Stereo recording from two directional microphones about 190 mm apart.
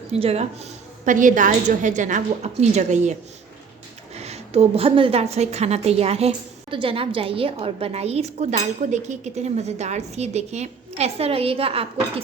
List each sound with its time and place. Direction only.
0.1 s a woman's voice: 35° right (ahead or behind)